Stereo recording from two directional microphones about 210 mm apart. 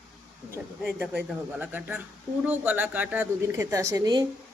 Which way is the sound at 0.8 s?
5° right (ahead or behind).